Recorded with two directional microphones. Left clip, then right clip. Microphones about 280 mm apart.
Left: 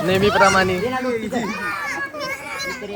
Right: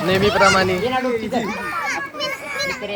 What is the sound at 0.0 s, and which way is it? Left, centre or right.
Speech, centre.